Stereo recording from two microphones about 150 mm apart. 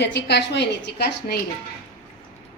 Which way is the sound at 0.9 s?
90° left.